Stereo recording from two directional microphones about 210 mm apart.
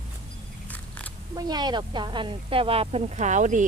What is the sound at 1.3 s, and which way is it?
Speech, 20° right (ahead or behind).